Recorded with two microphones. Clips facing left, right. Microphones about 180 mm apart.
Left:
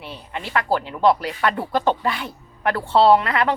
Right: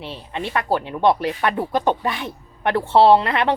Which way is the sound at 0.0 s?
25° right (ahead or behind).